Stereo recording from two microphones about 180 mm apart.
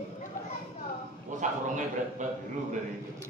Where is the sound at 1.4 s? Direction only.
45° right (ahead or behind).